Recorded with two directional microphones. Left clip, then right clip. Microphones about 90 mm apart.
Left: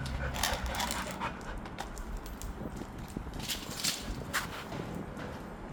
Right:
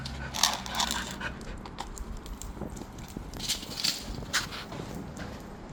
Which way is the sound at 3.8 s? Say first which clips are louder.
Right 4 dB; 15° left (ahead or behind).